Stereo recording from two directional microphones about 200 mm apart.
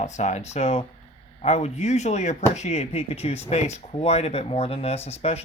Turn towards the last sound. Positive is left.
turn(degrees=30)  # may be behind; listen again after turning